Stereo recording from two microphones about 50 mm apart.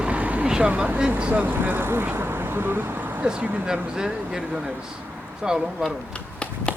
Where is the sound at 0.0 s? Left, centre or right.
Right.